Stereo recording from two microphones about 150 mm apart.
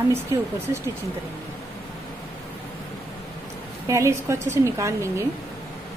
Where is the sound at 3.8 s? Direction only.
20° right (ahead or behind).